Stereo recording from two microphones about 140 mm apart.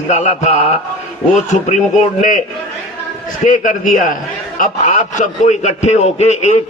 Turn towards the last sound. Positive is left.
turn(degrees=55)  # may be behind; listen again after turning